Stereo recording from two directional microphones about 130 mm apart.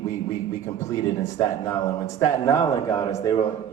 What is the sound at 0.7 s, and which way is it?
Speech, 20° left (ahead or behind).